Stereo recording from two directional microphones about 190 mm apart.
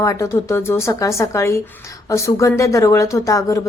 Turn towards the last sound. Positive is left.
turn(degrees=15)  # may be behind; listen again after turning